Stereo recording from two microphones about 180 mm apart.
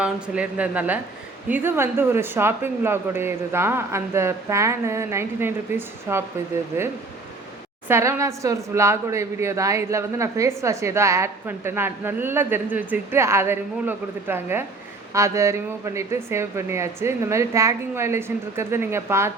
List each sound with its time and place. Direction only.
0.0 s speech: 5° right (ahead or behind)